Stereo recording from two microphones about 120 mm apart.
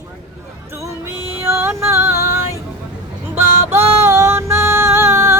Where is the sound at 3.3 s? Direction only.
20° right (ahead or behind).